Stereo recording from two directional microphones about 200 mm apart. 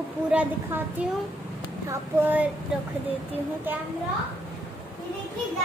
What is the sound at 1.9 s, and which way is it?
Speech, 10° right (ahead or behind).